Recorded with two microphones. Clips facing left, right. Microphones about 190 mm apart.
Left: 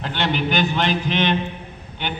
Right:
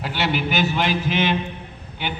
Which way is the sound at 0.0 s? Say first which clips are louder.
Left 1 dB; 5° right (ahead or behind).